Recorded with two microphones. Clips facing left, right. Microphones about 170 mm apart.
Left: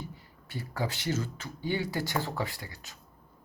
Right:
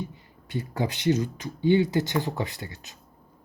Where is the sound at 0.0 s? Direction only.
20° right (ahead or behind).